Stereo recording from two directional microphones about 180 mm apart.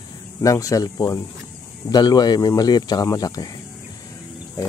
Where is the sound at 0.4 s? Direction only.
20° left (ahead or behind).